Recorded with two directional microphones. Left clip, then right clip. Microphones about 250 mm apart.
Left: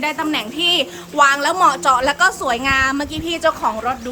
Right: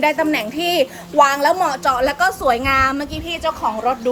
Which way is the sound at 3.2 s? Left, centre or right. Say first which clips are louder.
Left 3 dB; centre.